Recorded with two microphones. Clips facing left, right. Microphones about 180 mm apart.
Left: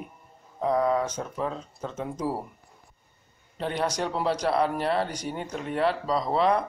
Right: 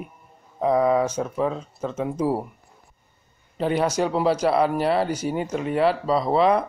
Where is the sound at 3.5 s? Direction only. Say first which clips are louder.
Right 6 dB; 5° right (ahead or behind).